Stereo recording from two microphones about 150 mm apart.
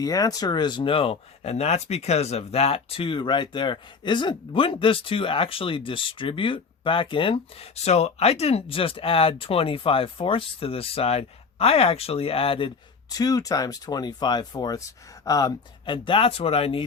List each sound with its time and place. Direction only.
0.0 s speech: 25° left (ahead or behind)